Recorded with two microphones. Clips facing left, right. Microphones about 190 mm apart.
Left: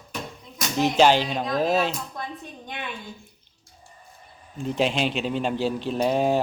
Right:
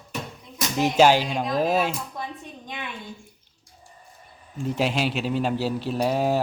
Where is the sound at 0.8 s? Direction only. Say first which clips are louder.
Right 1 dB; 10° right (ahead or behind).